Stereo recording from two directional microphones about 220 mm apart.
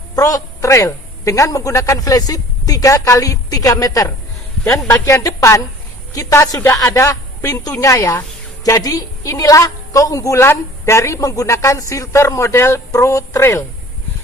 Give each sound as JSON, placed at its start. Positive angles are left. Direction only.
{"t": 0.2, "sound": "a woman's voice", "side_deg": 15}